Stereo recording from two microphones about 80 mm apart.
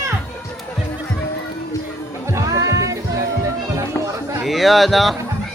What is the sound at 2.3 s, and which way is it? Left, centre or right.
Music, right.